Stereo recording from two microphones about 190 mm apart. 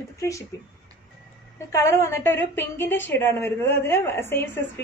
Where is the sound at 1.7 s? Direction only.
15° left (ahead or behind).